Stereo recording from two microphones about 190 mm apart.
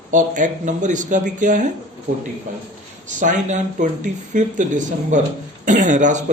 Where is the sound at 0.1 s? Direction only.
40° right (ahead or behind).